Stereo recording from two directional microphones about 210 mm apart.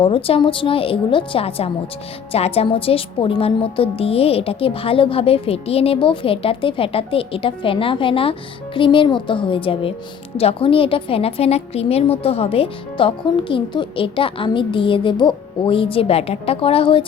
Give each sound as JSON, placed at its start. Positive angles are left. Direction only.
{"t": 0.0, "sound": "a woman's voice", "side_deg": 25}